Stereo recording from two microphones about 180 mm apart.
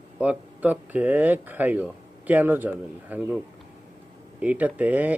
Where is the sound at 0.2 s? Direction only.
10° right (ahead or behind).